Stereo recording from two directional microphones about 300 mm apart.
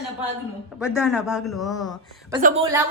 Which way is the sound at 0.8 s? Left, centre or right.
Centre.